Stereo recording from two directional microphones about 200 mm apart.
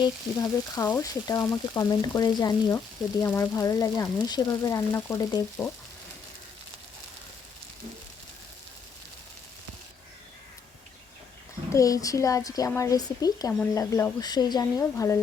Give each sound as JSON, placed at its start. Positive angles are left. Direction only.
{"t": 0.8, "sound": "frying", "side_deg": 10}
{"t": 11.7, "sound": "frying", "side_deg": 15}